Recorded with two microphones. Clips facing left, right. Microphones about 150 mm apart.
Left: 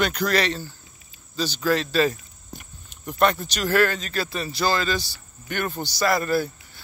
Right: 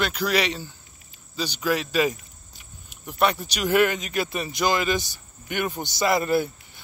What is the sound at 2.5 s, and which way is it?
Walk, 55° left (ahead or behind).